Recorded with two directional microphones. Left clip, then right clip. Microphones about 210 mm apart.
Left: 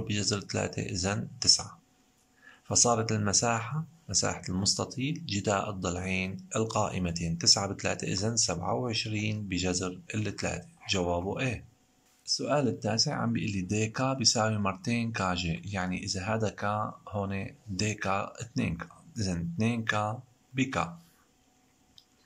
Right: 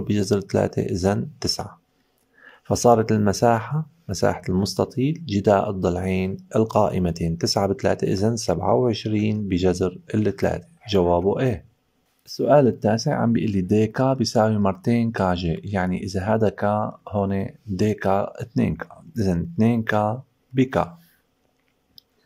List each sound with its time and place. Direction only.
0.0 s speech: 30° right (ahead or behind)